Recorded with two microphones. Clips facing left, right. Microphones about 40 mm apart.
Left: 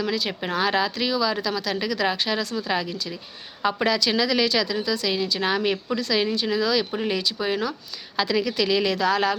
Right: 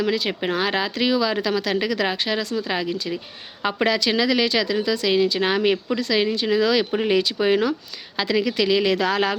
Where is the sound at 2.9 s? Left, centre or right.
Right.